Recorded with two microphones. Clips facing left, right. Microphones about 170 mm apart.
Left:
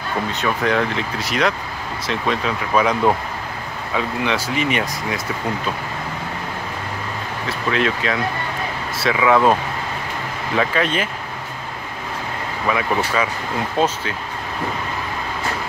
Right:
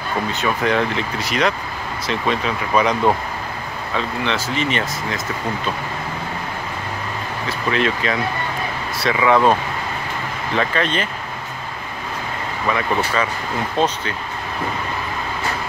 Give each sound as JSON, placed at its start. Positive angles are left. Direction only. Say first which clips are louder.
{"t": 0.3, "sound": "speech", "louder": "even", "side_deg": 0}
{"t": 7.4, "sound": "speech", "louder": "even", "side_deg": 0}
{"t": 10.5, "sound": "speech", "louder": "left 1 dB", "side_deg": 5}
{"t": 12.6, "sound": "speech", "louder": "even", "side_deg": 5}